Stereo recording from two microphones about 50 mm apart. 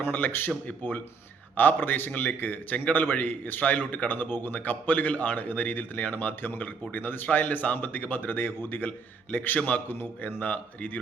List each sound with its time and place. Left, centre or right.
0.0 s a man's voice: left
0.7 s speech: left
1.5 s a man's voice: left